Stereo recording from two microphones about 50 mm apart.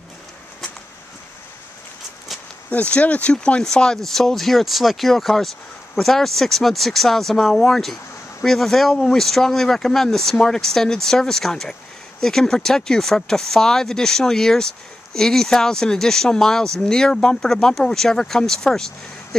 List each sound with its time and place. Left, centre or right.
2.7 s speech: left; by 18.9 s centre